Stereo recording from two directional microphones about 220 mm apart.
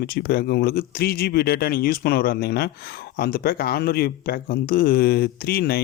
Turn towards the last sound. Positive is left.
turn(degrees=45)  # may be behind; listen again after turning